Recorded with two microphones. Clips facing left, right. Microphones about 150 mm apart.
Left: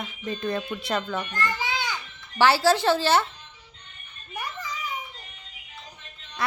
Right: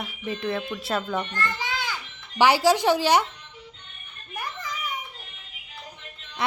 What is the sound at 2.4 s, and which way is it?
Speech, 15° right (ahead or behind).